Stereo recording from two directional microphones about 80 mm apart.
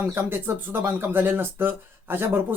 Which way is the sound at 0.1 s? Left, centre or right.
Right.